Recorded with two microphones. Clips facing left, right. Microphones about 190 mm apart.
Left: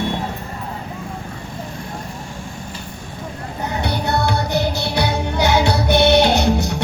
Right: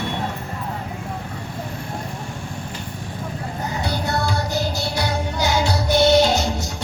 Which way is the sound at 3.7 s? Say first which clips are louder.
Left 4 dB; 65° left (ahead or behind).